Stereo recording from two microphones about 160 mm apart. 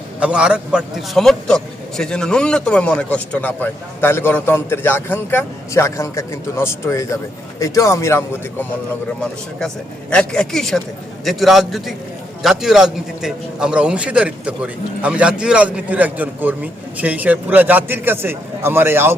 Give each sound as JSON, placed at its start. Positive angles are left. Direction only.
{"t": 0.2, "sound": "a man's voice", "side_deg": -5}
{"t": 9.2, "sound": "a man's voice", "side_deg": 5}